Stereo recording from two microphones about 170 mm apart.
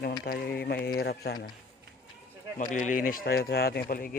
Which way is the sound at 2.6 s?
45° left (ahead or behind).